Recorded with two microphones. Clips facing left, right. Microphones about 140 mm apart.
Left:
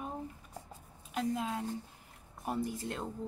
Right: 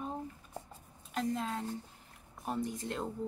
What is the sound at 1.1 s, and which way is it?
Speech, 5° left (ahead or behind).